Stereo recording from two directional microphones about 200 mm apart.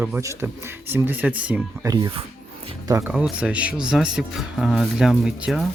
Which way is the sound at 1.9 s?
20° right (ahead or behind).